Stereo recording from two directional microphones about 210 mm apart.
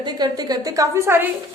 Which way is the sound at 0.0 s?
20° right (ahead or behind).